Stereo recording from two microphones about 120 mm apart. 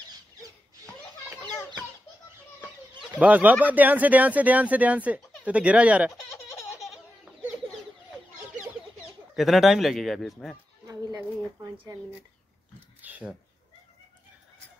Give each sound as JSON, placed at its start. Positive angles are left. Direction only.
{"t": 3.2, "sound": "speech", "side_deg": -10}
{"t": 5.4, "sound": "baby laughter", "side_deg": -10}
{"t": 9.3, "sound": "a man's voice", "side_deg": 0}
{"t": 10.9, "sound": "pigeon", "side_deg": -30}
{"t": 13.0, "sound": "a sound", "side_deg": -15}